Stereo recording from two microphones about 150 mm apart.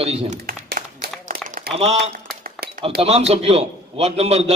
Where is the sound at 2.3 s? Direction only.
90° right.